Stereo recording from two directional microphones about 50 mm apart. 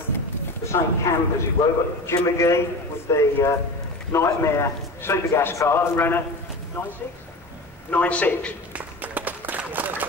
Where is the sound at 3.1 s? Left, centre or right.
Left.